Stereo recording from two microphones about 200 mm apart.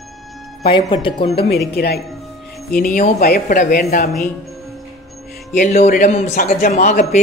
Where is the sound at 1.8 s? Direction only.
50° left (ahead or behind).